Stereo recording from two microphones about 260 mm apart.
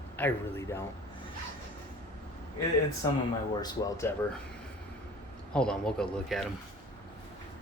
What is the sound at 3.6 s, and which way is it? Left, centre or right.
Speech, centre.